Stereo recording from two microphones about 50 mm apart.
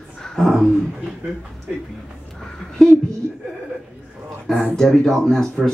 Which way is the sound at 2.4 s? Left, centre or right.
Centre.